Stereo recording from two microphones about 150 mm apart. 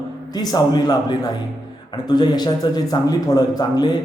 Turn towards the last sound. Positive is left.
turn(degrees=25)  # may be behind; listen again after turning